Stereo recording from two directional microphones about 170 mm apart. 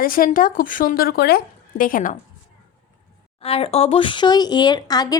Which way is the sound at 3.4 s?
35° left (ahead or behind).